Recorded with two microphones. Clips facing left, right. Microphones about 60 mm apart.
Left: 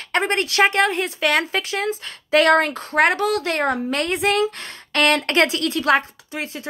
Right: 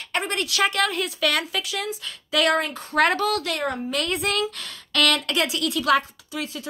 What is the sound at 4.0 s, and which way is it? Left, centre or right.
A woman's voice, left.